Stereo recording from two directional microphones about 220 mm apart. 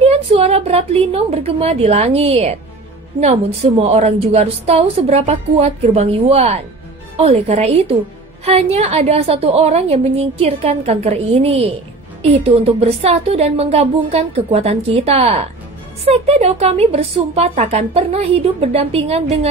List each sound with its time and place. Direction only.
0.0 s a woman's voice: 25° right (ahead or behind)